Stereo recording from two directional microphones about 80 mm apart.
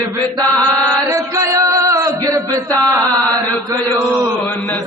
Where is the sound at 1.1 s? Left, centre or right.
Right.